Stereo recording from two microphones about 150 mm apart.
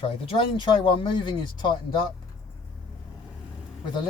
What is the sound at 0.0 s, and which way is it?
Speech, 35° left (ahead or behind).